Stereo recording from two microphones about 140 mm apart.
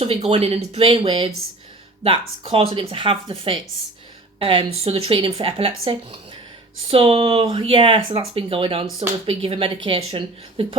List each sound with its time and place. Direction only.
0.0 s speech: 45° right (ahead or behind)